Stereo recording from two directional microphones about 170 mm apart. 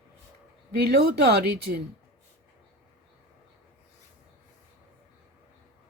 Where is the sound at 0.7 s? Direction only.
70° right (ahead or behind).